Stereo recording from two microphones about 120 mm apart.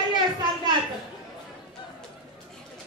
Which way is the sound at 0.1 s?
35° right (ahead or behind).